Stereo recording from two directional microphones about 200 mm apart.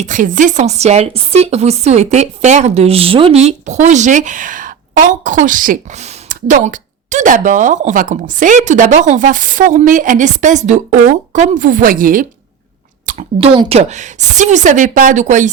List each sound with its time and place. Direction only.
0.0 s speech: 40° right (ahead or behind)
13.1 s speech: 35° right (ahead or behind)